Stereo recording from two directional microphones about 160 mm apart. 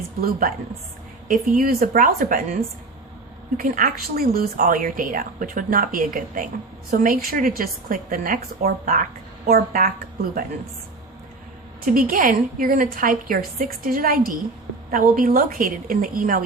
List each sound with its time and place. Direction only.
0.2 s speech: 60° right (ahead or behind)
3.6 s speech: 60° right (ahead or behind)
11.9 s speech: 60° right (ahead or behind)